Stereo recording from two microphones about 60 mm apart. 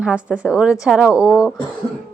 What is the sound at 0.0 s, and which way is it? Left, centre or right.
A woman's voice, centre.